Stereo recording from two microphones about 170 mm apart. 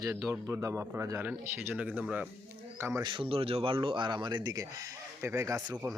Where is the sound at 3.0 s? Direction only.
30° right (ahead or behind).